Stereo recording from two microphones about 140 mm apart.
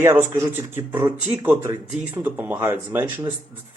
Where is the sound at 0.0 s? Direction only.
15° right (ahead or behind).